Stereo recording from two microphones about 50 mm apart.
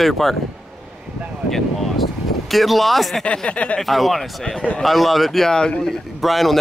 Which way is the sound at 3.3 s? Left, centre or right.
Left.